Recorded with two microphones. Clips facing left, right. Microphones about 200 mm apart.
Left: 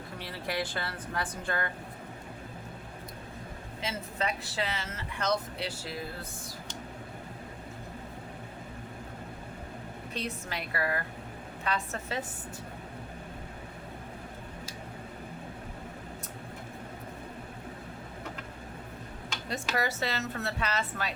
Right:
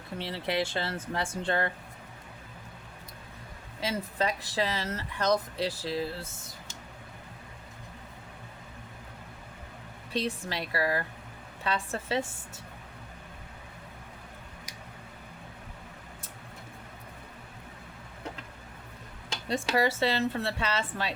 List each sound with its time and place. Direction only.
0.2 s a woman's voice: 25° right (ahead or behind)
3.8 s speech: 35° right (ahead or behind)
10.1 s a woman's voice: 30° right (ahead or behind)
19.5 s a woman's voice: 30° right (ahead or behind)